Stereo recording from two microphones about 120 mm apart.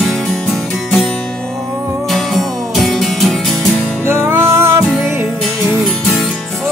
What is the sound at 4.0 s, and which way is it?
Music, 20° right (ahead or behind).